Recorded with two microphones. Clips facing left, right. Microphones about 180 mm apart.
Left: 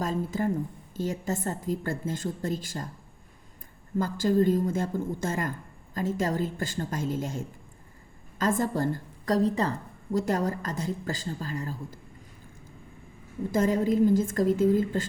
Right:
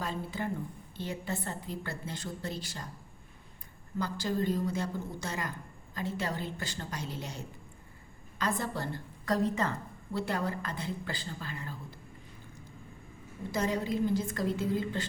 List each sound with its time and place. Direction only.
0.0 s a woman's voice: 45° left (ahead or behind)
3.9 s a woman's voice: 45° left (ahead or behind)
13.5 s a woman's voice: 45° left (ahead or behind)